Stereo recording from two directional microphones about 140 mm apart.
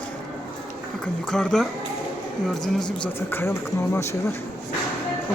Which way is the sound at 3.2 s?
15° left (ahead or behind).